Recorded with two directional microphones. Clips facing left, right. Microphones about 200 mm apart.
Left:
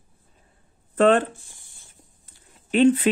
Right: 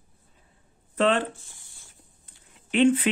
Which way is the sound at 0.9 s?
50° left (ahead or behind).